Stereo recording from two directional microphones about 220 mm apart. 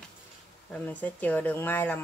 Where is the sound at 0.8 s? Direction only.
5° left (ahead or behind).